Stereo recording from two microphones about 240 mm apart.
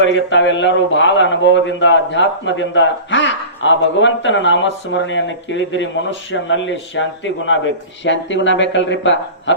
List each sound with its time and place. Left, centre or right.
0.0 s a man's voice: left